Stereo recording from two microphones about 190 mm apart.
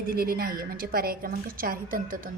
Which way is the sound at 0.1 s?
50° right (ahead or behind).